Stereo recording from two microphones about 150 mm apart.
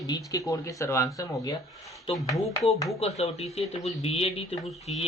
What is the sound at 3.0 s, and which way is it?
A man's voice, 45° left (ahead or behind).